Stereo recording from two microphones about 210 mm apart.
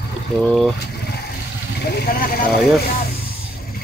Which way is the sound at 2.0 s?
45° left (ahead or behind).